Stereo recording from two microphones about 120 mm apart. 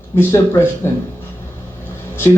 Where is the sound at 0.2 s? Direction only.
20° left (ahead or behind).